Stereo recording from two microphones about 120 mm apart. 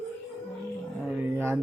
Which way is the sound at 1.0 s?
15° right (ahead or behind).